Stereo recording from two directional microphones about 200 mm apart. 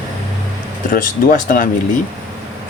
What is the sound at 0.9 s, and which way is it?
Speech, 40° left (ahead or behind).